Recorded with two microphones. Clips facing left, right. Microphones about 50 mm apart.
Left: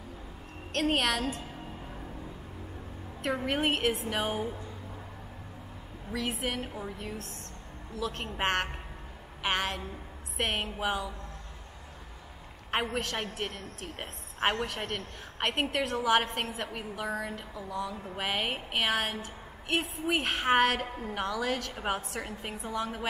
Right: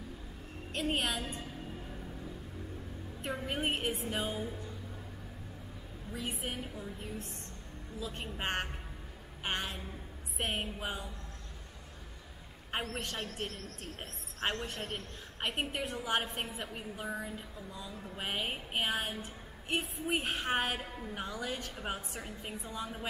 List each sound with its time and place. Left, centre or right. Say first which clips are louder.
0.7 s a woman's voice: left 6 dB; left
3.4 s a woman's voice: left 6 dB; left
6.1 s a woman's voice: left 6 dB; left
7.0 s a woman's voice: left 3 dB; left
12.9 s a woman's voice: left 6 dB; left
18.1 s a woman's voice: left 4 dB; left